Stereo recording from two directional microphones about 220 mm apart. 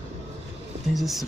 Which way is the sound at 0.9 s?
Centre (ahead or behind).